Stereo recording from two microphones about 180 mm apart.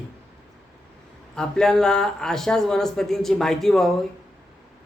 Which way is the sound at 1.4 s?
5° left (ahead or behind).